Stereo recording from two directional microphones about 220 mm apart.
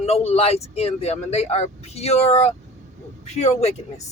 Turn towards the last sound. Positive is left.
turn(degrees=30)  # may be behind; listen again after turning